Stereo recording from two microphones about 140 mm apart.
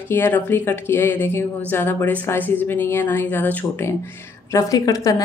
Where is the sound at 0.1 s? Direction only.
15° left (ahead or behind).